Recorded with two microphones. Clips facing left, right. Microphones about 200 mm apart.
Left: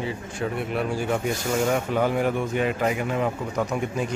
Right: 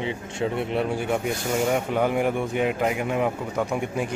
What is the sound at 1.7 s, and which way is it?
A man's voice, 15° right (ahead or behind).